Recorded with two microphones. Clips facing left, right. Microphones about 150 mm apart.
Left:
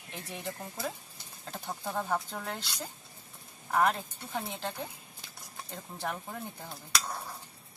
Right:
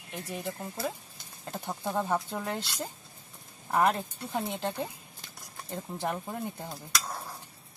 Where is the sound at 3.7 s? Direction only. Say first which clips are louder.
Right 2 dB; 15° right (ahead or behind).